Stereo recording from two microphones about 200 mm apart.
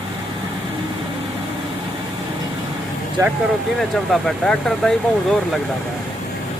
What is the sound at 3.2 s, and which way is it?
Speech, 15° right (ahead or behind).